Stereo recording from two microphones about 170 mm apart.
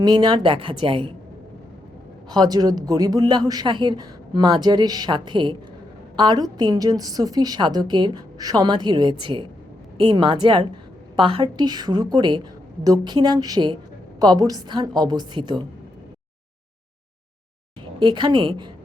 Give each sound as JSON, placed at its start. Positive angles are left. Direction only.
{"t": 0.0, "sound": "speech", "side_deg": -25}
{"t": 2.3, "sound": "speech", "side_deg": -25}
{"t": 18.0, "sound": "speech", "side_deg": -25}